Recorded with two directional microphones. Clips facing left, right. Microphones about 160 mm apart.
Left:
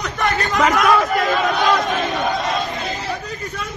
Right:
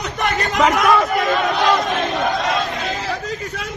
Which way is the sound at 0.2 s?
20° right (ahead or behind).